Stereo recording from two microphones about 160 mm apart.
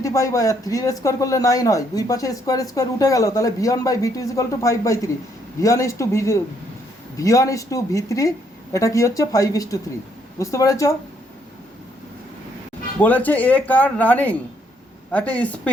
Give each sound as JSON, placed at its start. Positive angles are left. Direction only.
{"t": 0.0, "sound": "a man's voice", "side_deg": 20}
{"t": 13.0, "sound": "speech", "side_deg": 10}